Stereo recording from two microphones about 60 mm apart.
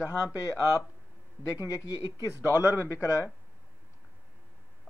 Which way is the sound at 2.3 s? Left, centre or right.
Right.